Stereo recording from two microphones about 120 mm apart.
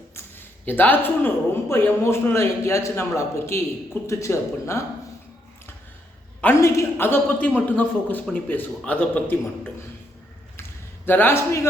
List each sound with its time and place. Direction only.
0.2 s a man's voice: 15° left (ahead or behind)
6.4 s a man's voice: 20° left (ahead or behind)
10.6 s a sound: 15° left (ahead or behind)